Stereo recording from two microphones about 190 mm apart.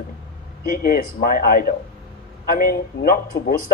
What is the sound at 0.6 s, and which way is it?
Speech, 50° left (ahead or behind).